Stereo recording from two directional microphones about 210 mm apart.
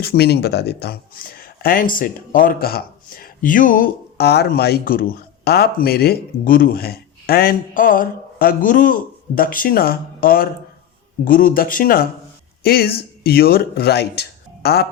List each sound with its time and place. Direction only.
0.0 s speech: 50° left (ahead or behind)